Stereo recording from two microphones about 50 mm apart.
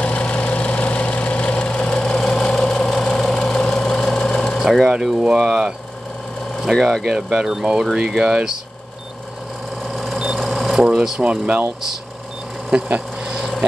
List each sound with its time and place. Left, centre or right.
0.0 s engine: left
3.3 s a sound: centre
4.8 s speech: centre
7.1 s speech: centre
9.8 s a sound: centre
11.1 s speech: right
12.7 s speech: right
13.2 s vehicle: centre